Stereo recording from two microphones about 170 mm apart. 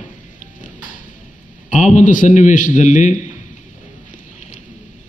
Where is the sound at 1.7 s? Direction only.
50° left (ahead or behind).